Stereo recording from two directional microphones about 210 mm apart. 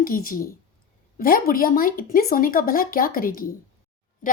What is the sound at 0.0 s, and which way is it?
Speech, 40° left (ahead or behind).